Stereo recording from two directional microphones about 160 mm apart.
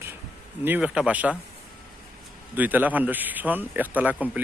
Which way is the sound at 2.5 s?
10° right (ahead or behind).